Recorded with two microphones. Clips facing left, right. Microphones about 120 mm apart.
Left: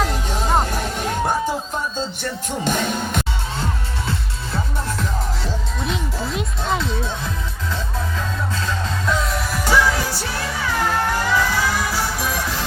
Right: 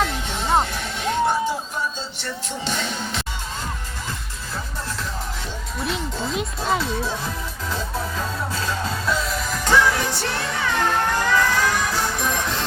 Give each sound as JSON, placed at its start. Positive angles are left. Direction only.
{"t": 0.0, "sound": "music", "side_deg": 40}
{"t": 2.6, "sound": "music", "side_deg": 50}
{"t": 5.8, "sound": "music", "side_deg": 0}
{"t": 9.5, "sound": "music", "side_deg": 10}